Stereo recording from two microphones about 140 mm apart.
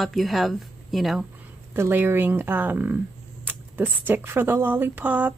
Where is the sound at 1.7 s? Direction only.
15° right (ahead or behind).